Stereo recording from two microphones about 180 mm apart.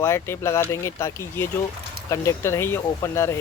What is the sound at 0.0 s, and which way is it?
Speech, 15° left (ahead or behind).